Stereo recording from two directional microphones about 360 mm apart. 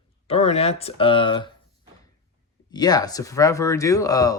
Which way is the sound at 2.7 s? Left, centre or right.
Centre.